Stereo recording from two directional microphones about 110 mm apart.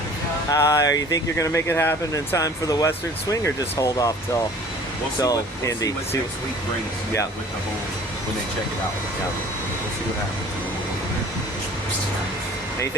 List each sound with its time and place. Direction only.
0.5 s speech: 30° left (ahead or behind)
5.2 s speech: 35° left (ahead or behind)